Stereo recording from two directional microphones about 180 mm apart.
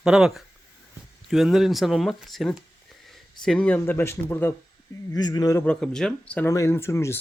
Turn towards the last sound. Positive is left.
turn(degrees=15)  # may be behind; listen again after turning